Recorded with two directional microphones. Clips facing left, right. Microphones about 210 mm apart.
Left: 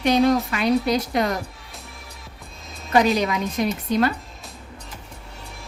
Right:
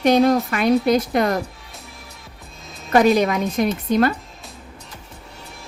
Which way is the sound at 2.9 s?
50° right (ahead or behind).